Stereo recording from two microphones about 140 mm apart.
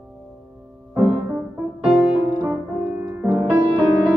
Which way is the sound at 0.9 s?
10° right (ahead or behind).